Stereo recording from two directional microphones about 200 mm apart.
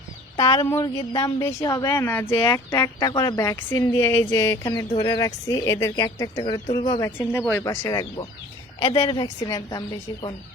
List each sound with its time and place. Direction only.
0.3 s a woman's voice: 20° left (ahead or behind)
7.2 s a woman's voice: 10° left (ahead or behind)